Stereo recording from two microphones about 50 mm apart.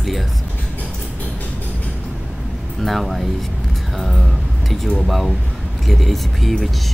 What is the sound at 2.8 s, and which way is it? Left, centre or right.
Speech, centre.